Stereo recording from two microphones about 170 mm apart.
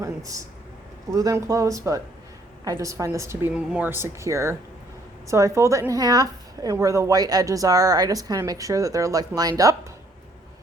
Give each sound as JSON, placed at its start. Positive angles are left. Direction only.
{"t": 0.0, "sound": "a woman's voice", "side_deg": -20}